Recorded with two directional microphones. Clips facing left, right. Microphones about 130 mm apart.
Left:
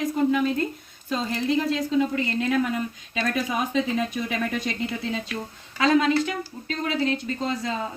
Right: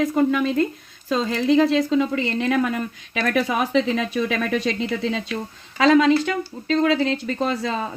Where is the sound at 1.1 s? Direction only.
90° right.